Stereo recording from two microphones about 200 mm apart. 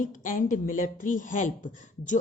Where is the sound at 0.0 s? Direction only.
40° left (ahead or behind).